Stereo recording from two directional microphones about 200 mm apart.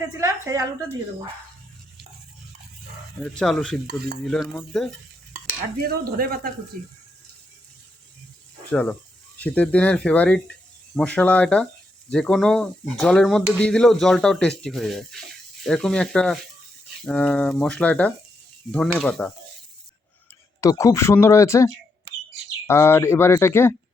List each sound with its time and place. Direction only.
0.2 s a woman's voice: 15° right (ahead or behind)
3.2 s speech: 5° left (ahead or behind)
3.8 s speech: 50° right (ahead or behind)
4.3 s speech: 5° left (ahead or behind)
5.8 s speech: 50° right (ahead or behind)
8.7 s speech: 5° left (ahead or behind)
20.6 s speech: 15° left (ahead or behind)